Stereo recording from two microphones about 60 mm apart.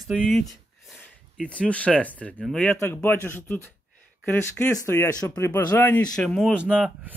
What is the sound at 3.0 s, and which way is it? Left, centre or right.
Speech, left.